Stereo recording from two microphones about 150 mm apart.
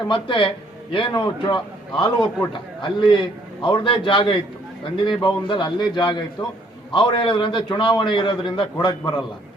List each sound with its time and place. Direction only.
0.1 s a man's voice: 35° left (ahead or behind)